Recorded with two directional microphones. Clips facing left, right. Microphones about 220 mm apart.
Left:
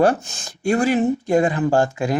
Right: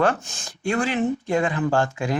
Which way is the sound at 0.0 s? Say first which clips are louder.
Left 5 dB; 40° left (ahead or behind).